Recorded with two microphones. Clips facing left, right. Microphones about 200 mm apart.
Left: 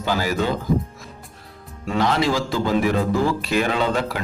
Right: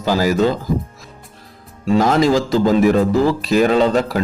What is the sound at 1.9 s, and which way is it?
A man's voice, 45° right (ahead or behind).